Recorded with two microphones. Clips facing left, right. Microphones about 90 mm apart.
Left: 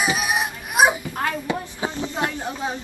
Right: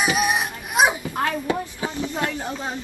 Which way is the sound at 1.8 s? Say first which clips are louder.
Left 1 dB; 20° left (ahead or behind).